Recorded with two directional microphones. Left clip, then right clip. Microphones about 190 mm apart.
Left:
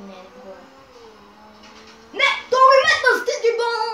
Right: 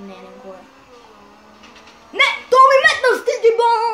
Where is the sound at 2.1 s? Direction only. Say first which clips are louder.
Right 5 dB; 60° right (ahead or behind).